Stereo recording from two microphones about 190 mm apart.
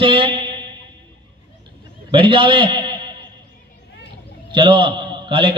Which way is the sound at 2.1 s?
25° right (ahead or behind).